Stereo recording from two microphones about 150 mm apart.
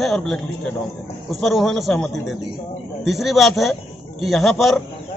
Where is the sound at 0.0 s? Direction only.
5° left (ahead or behind).